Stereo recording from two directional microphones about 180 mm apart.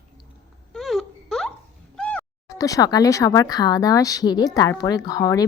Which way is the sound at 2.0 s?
5° left (ahead or behind).